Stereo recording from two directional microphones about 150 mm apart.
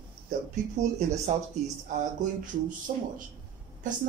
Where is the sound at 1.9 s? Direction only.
60° right (ahead or behind).